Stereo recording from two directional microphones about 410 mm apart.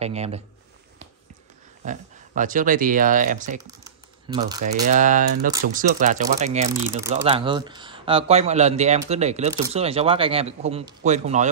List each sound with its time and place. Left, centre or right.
0.0 s speech: centre
1.9 s speech: centre